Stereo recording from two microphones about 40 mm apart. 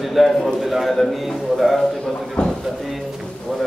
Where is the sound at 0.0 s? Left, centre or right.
Centre.